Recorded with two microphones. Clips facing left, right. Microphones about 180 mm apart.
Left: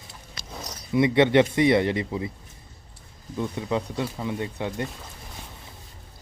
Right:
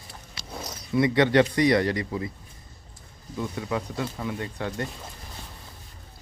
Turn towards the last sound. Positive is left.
turn(degrees=20)  # may be behind; listen again after turning